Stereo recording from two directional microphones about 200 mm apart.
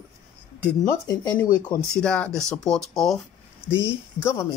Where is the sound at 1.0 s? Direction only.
15° left (ahead or behind).